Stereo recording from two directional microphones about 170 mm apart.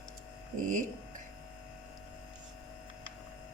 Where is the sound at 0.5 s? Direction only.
50° right (ahead or behind).